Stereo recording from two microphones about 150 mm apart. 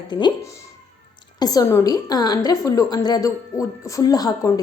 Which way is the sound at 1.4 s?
25° left (ahead or behind).